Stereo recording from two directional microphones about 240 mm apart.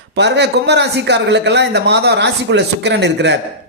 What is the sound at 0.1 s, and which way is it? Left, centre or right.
Speech, right.